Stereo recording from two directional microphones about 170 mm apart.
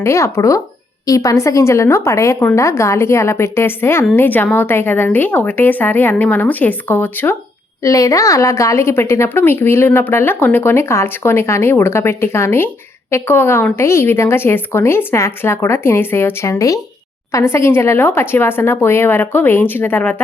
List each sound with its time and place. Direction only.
0.0 s a woman's voice: 15° left (ahead or behind)